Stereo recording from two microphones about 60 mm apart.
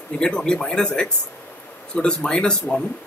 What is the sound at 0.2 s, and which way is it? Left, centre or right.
A man's voice, centre.